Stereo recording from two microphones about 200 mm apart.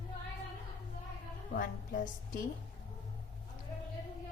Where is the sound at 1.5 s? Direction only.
45° left (ahead or behind).